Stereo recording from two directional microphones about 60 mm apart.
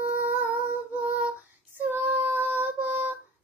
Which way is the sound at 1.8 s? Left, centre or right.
Right.